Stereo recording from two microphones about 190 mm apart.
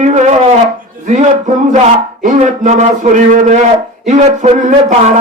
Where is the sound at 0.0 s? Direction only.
40° right (ahead or behind).